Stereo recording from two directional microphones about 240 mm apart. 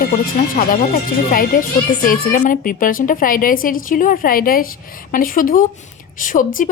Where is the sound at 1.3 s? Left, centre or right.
Left.